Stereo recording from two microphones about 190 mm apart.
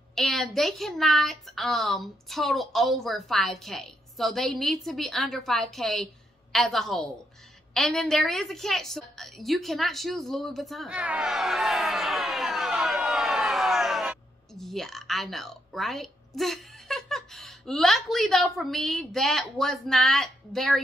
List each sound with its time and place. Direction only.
0.1 s a child's voice: centre (ahead or behind)